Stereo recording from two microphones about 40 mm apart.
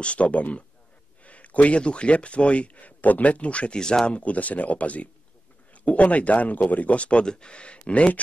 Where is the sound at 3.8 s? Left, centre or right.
Left.